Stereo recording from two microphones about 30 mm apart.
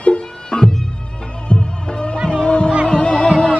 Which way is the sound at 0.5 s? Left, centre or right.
Left.